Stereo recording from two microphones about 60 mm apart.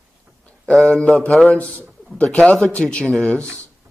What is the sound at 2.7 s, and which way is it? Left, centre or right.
Speech, centre.